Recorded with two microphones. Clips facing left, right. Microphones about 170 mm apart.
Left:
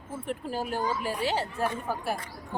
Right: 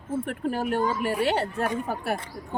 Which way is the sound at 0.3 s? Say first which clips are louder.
Right 2 dB; 60° right (ahead or behind).